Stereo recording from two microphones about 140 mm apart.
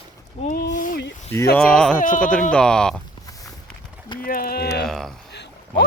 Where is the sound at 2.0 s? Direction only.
70° left (ahead or behind).